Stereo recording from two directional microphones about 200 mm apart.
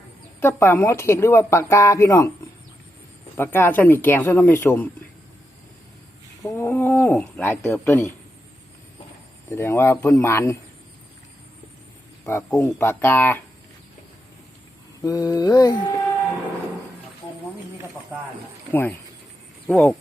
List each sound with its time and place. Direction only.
0.3 s speech: 10° left (ahead or behind)
3.3 s speech: 10° left (ahead or behind)
6.4 s speech: 10° left (ahead or behind)
9.5 s speech: 15° left (ahead or behind)
12.2 s speech: 15° left (ahead or behind)
15.0 s mantra: 20° left (ahead or behind)
18.7 s speech: 10° left (ahead or behind)